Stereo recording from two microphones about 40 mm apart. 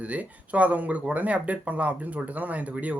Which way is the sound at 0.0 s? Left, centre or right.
Right.